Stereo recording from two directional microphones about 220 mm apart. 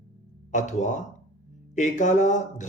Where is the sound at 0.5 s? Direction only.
35° left (ahead or behind).